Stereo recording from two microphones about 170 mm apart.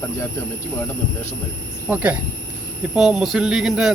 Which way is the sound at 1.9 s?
10° right (ahead or behind).